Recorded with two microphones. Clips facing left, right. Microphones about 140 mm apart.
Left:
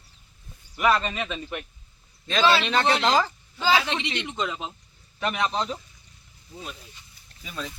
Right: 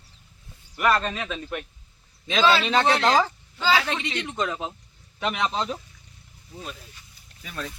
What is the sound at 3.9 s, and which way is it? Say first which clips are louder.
Speech: even; 20° left (ahead or behind).